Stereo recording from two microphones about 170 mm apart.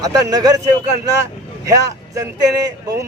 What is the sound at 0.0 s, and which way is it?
Speech, 20° right (ahead or behind).